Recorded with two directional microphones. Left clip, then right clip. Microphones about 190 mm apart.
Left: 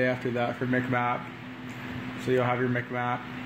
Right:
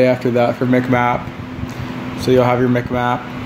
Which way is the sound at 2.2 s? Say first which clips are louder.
Right 13 dB; 10° right (ahead or behind).